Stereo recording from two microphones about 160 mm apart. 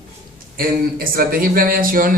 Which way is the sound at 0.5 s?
65° right (ahead or behind).